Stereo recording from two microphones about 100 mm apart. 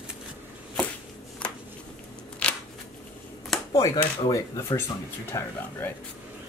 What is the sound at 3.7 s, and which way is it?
Speech, 35° left (ahead or behind).